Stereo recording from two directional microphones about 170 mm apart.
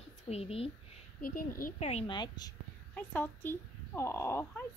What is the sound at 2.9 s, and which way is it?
A child's voice, 10° left (ahead or behind).